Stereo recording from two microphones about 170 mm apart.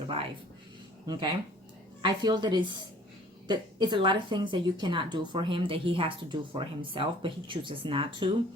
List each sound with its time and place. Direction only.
1.0 s speech: 25° right (ahead or behind)